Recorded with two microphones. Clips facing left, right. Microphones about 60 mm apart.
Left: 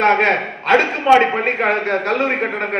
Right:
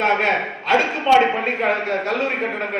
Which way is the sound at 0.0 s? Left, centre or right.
Left.